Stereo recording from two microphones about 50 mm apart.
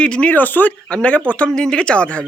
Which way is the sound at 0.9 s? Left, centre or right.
Left.